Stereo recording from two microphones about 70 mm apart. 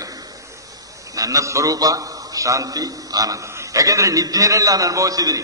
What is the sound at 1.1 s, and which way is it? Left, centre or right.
A man's voice, right.